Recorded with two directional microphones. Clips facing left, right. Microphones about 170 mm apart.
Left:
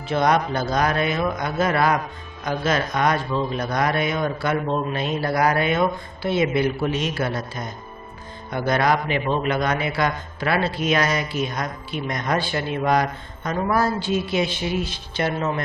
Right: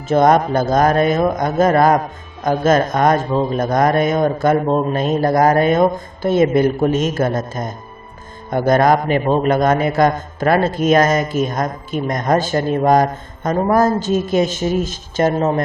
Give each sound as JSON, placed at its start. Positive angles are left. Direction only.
{"t": 0.1, "sound": "a man's voice", "side_deg": -45}